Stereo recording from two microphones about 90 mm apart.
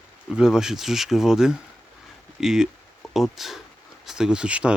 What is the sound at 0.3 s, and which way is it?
Speech, 5° right (ahead or behind).